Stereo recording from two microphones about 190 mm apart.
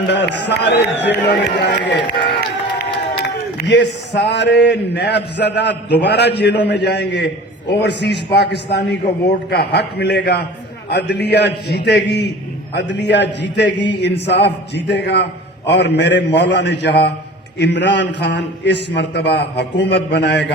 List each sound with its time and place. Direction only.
0.1 s a man's voice: 65° left (ahead or behind)
2.0 s speech: 25° left (ahead or behind)
3.2 s a sound: 65° left (ahead or behind)
4.1 s a man's voice: 65° left (ahead or behind)